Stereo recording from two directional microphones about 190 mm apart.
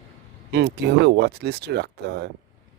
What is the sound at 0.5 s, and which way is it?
Speech, 60° right (ahead or behind).